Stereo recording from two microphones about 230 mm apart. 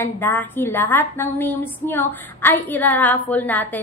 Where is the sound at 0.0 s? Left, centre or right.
Centre.